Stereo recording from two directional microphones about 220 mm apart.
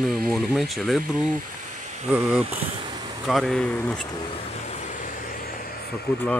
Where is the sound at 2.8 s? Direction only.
20° right (ahead or behind).